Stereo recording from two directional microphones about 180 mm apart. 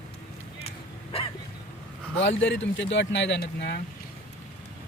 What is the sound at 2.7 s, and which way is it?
Speech, 85° left.